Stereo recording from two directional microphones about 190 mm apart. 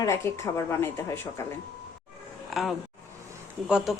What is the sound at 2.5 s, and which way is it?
A woman's voice, centre (ahead or behind).